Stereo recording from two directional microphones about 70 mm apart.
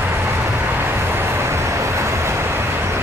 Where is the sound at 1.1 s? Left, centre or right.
Right.